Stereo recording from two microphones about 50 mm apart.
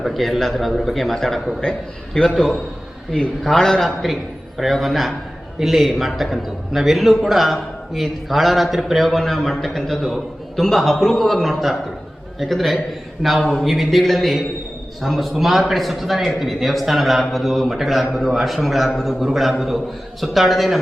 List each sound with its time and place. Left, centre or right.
0.0 s a man's voice: centre
2.1 s a man's voice: centre
3.1 s a man's voice: centre